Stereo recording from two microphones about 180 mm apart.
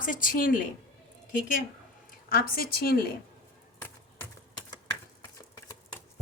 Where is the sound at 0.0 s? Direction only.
50° left (ahead or behind).